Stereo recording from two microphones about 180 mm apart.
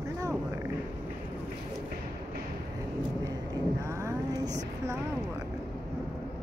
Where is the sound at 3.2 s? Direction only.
15° right (ahead or behind).